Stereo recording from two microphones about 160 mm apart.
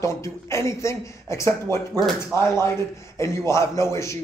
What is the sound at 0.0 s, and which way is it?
A man's voice, 15° left (ahead or behind).